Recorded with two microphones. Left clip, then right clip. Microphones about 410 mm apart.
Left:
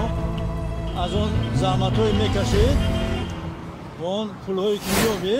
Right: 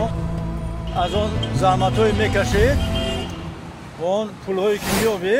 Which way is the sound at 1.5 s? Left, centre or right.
Centre.